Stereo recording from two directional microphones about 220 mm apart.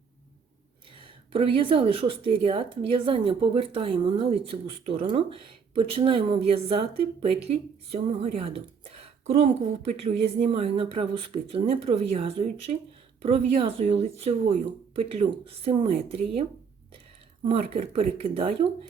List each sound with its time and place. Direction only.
1.3 s speech: 25° right (ahead or behind)
17.5 s speech: 25° right (ahead or behind)